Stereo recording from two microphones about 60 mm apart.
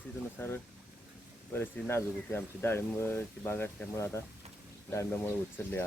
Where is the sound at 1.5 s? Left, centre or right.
Left.